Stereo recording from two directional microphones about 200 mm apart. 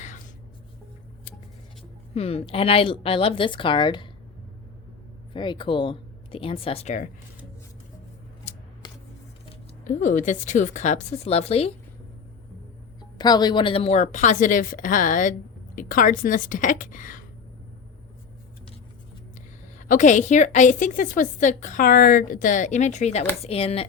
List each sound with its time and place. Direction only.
2.1 s a woman's voice: 30° left (ahead or behind)
5.3 s a woman's voice: 25° left (ahead or behind)
8.5 s scissors: 35° left (ahead or behind)
9.8 s a woman's voice: 40° left (ahead or behind)
13.0 s a woman's voice: 20° left (ahead or behind); by 17.2 s 40° left (ahead or behind)
19.9 s a woman's voice: 40° left (ahead or behind)